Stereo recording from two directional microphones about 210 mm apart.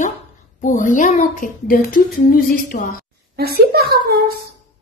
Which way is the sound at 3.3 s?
50° right (ahead or behind).